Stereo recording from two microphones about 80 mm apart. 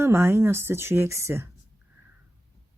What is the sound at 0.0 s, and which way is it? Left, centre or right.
Speech, right.